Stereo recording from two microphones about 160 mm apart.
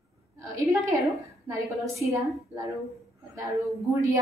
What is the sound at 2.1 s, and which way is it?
A woman's voice, 20° right (ahead or behind).